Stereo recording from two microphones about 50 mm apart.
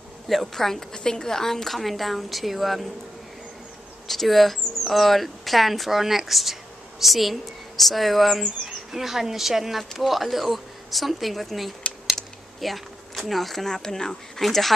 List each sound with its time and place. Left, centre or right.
0.3 s a woman's voice: centre
4.1 s a woman's voice: centre